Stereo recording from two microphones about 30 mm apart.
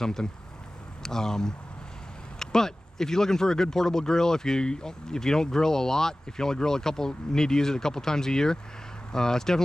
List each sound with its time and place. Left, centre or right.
0.0 s speech: left